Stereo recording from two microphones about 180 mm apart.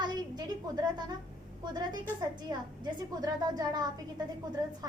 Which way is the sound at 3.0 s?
20° right (ahead or behind).